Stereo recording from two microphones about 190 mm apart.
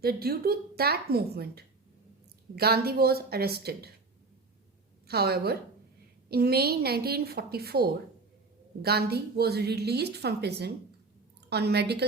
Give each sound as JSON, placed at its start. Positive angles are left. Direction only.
{"t": 0.0, "sound": "a woman's voice", "side_deg": -55}
{"t": 5.0, "sound": "a woman's voice", "side_deg": -55}